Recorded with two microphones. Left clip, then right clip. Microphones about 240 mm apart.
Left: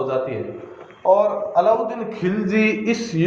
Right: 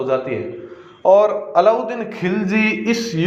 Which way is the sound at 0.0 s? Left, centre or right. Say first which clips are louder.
Right 3 dB; right.